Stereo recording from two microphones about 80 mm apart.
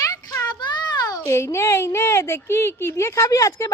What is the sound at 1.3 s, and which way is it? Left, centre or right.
A woman's voice, left.